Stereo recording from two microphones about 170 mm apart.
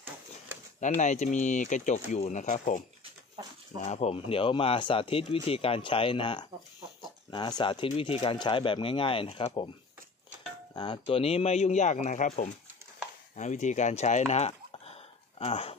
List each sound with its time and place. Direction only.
0.7 s speech: 45° left (ahead or behind)
3.8 s speech: 40° left (ahead or behind)
10.7 s speech: 25° left (ahead or behind)